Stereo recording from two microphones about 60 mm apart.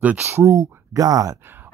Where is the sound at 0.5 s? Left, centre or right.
Right.